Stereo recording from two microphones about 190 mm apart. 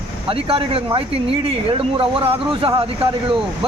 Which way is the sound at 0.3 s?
30° right (ahead or behind).